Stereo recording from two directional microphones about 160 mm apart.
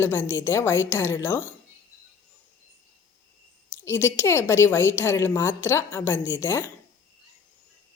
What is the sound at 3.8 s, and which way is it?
A woman's voice, 15° left (ahead or behind).